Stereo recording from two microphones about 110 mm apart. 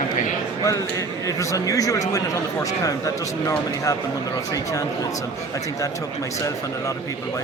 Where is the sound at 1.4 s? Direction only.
30° left (ahead or behind).